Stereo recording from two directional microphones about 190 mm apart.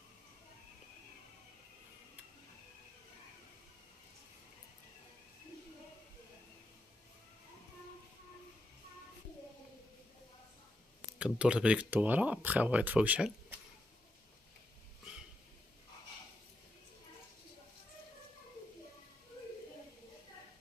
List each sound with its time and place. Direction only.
11.1 s speech: 5° right (ahead or behind)